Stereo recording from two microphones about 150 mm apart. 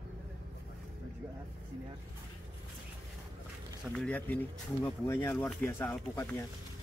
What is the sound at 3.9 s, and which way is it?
Speech, 10° left (ahead or behind).